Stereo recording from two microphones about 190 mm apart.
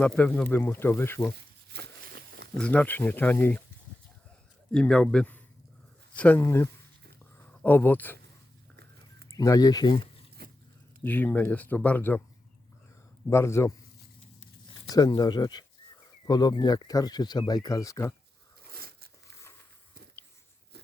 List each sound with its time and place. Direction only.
0.0 s a man's voice: 5° left (ahead or behind)
1.7 s a sound: 60° right (ahead or behind)
2.6 s speech: 5° left (ahead or behind)
4.7 s a man's voice: 5° left (ahead or behind)
9.3 s speech: 15° left (ahead or behind)
10.4 s dog: 55° right (ahead or behind)
11.0 s speech: 10° left (ahead or behind)
13.3 s speech: 15° left (ahead or behind)
18.7 s a sound: 55° right (ahead or behind)